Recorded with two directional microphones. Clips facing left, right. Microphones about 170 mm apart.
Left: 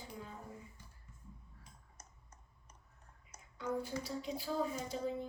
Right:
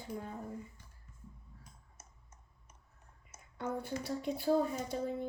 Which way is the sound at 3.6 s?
60° right (ahead or behind).